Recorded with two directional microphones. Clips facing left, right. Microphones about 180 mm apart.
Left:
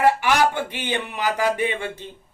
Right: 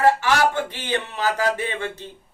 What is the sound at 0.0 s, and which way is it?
Speech, 15° left (ahead or behind).